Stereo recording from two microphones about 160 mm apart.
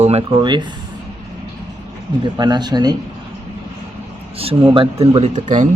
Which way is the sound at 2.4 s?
25° right (ahead or behind).